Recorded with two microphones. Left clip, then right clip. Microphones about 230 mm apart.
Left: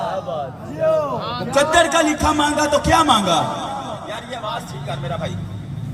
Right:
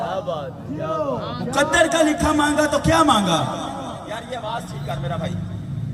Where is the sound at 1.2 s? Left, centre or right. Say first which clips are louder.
Left 4 dB; left.